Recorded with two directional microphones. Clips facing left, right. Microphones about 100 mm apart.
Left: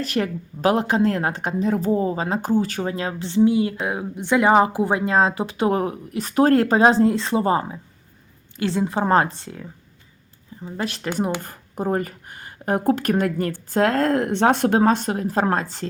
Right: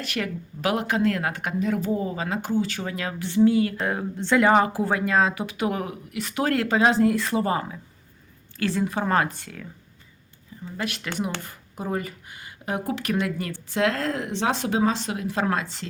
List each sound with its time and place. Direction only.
0.0 s speech: 35° left (ahead or behind)
2.9 s speech: 30° left (ahead or behind)
11.4 s speech: 45° left (ahead or behind)